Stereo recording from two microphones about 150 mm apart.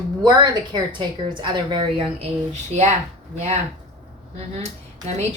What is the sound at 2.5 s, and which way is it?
Speech, 50° right (ahead or behind).